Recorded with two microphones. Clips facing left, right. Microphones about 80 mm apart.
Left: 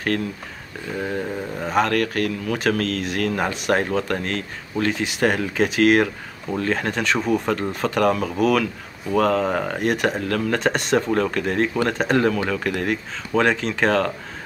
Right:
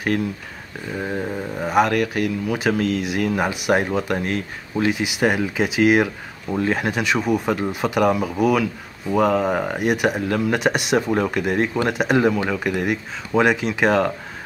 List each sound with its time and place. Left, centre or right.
0.9 s speech: centre